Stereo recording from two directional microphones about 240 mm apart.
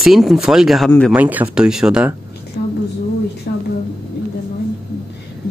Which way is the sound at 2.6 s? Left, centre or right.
Left.